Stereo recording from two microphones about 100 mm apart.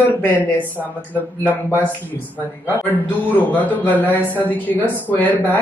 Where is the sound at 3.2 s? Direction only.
15° left (ahead or behind).